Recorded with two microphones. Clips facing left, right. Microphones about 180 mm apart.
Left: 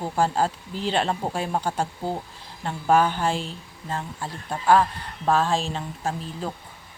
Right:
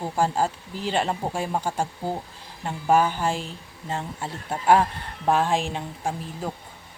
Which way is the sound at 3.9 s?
25° right (ahead or behind).